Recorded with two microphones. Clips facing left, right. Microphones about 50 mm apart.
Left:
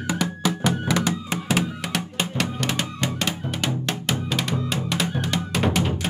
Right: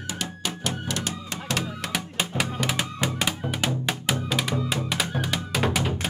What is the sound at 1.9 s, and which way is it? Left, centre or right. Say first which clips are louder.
Music: even; centre.